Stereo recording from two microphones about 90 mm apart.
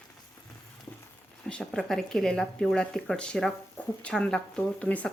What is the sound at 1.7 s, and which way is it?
Speech, 5° left (ahead or behind).